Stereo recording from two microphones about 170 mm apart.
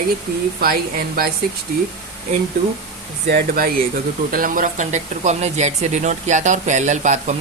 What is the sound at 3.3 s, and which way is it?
A woman's voice, 60° right (ahead or behind).